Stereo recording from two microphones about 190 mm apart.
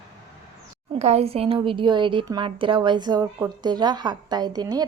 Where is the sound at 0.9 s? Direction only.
35° right (ahead or behind).